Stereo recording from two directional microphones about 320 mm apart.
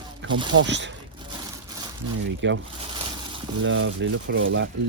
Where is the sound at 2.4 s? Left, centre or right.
Right.